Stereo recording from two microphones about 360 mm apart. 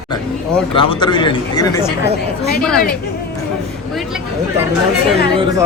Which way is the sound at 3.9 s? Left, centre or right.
Centre.